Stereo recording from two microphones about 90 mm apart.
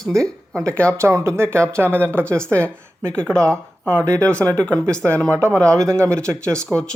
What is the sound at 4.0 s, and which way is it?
Speech, 35° right (ahead or behind).